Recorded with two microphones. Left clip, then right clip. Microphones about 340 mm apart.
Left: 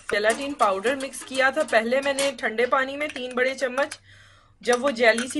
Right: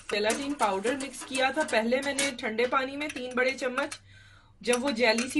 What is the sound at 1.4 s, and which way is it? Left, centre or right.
Speech, centre.